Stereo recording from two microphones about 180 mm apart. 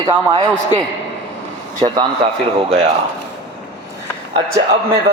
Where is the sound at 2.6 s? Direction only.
35° right (ahead or behind).